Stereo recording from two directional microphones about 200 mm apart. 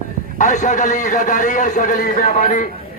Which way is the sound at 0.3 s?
35° left (ahead or behind).